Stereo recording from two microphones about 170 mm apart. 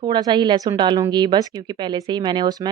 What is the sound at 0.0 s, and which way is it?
Speech, 25° right (ahead or behind).